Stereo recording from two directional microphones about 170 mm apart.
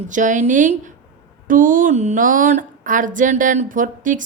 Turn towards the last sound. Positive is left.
turn(degrees=-50)  # may be behind; listen again after turning